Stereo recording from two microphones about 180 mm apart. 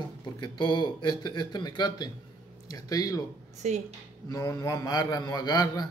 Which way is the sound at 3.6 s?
40° right (ahead or behind).